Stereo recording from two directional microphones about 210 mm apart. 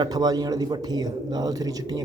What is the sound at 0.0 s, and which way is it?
Speech, 20° right (ahead or behind).